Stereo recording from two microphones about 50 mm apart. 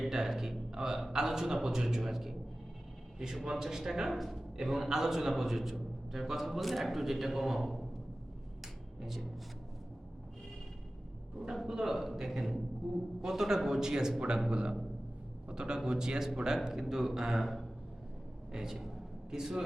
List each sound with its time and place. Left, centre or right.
0.0 s a man's voice: centre
3.4 s a man's voice: centre
8.6 s a sound: centre
11.5 s a man's voice: centre